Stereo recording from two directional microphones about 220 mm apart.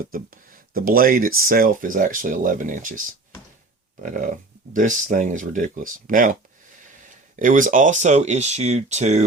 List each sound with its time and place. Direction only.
0.1 s speech: 40° right (ahead or behind)
4.0 s speech: 40° right (ahead or behind)
7.3 s speech: 35° right (ahead or behind)